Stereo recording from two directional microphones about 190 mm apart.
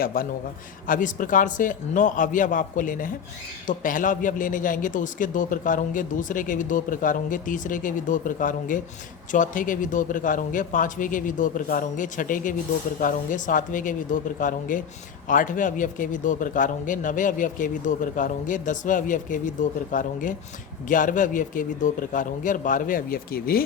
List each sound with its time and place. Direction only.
0.0 s a man's voice: 50° left (ahead or behind)